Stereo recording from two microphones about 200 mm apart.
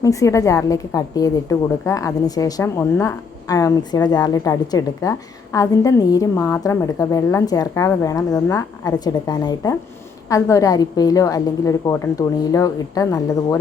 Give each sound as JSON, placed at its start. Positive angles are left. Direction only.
{"t": 0.0, "sound": "a woman's voice", "side_deg": 15}